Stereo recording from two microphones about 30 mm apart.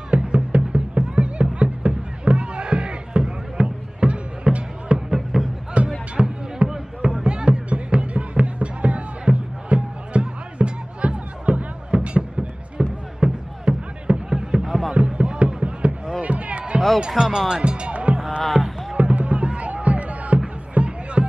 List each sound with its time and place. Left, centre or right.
0.1 s music: right
4.9 s a sound: centre
5.8 s music: right
6.2 s music: right
6.6 s a sound: right
7.1 s music: right
14.5 s a sound: right
15.0 s music: right
17.2 s speech: centre
17.6 s music: right
18.4 s music: centre
18.9 s music: right